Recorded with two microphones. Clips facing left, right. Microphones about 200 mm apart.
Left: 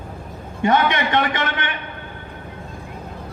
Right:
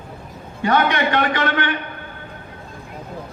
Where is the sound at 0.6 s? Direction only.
20° left (ahead or behind).